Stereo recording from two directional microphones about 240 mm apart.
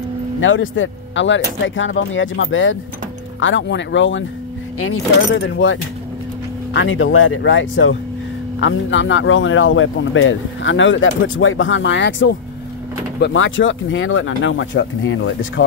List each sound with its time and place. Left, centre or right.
0.4 s speech: left